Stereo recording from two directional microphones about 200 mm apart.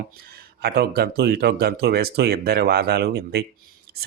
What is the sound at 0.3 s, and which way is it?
Speech, 50° right (ahead or behind).